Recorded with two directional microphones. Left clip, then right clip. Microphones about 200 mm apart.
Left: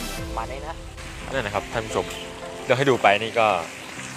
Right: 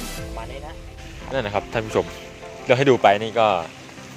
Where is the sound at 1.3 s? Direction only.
40° right (ahead or behind).